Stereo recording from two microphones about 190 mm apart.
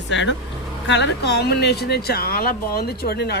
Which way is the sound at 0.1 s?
70° left (ahead or behind).